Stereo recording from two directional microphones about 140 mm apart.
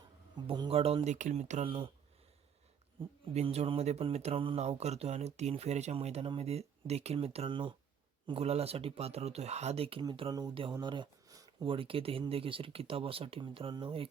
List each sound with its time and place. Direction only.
0.3 s speech: 35° right (ahead or behind); by 1.6 s 55° right (ahead or behind)
1.6 s speech: 40° right (ahead or behind)
3.3 s speech: 45° right (ahead or behind)
10.2 s speech: 30° right (ahead or behind)